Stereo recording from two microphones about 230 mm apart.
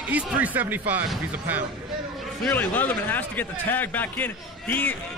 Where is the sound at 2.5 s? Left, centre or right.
Centre.